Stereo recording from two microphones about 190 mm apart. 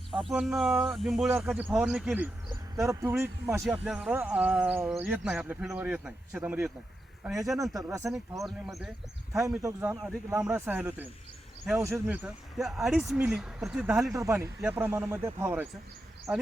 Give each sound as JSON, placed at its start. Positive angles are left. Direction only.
{"t": 0.1, "sound": "speech", "side_deg": 0}
{"t": 7.8, "sound": "speech", "side_deg": -15}
{"t": 8.4, "sound": "speech", "side_deg": 0}
{"t": 9.6, "sound": "speech", "side_deg": -15}
{"t": 14.1, "sound": "speech", "side_deg": -15}